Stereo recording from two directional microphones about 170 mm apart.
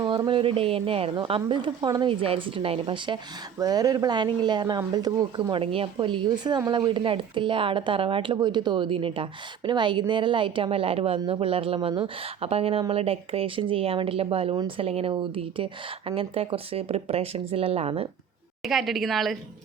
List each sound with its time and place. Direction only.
0.0 s speech: 25° right (ahead or behind)
14.5 s speech: 25° right (ahead or behind)
14.8 s speech: 35° right (ahead or behind)
18.6 s speech: centre (ahead or behind)